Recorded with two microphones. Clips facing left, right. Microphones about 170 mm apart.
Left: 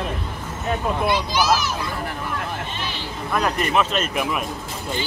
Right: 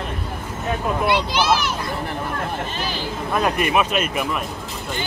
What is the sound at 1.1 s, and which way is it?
Speech, 60° right (ahead or behind).